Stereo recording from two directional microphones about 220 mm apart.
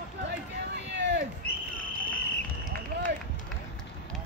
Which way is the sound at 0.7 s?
50° right (ahead or behind).